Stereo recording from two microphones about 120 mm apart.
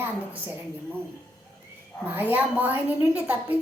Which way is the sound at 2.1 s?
15° right (ahead or behind).